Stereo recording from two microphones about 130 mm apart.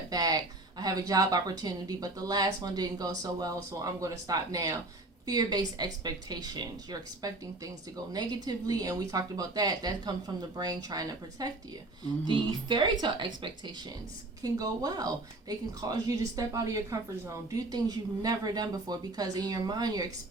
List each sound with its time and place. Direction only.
0.1 s a woman's voice: 30° right (ahead or behind)